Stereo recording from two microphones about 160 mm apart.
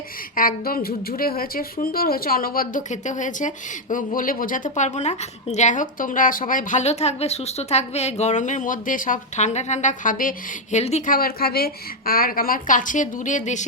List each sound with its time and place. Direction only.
0.3 s a woman's voice: 65° left (ahead or behind); by 11.1 s 45° left (ahead or behind)
11.1 s a woman's voice: 65° left (ahead or behind); by 13.7 s 50° left (ahead or behind)